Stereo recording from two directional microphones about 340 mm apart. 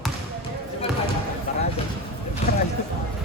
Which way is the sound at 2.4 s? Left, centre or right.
Centre.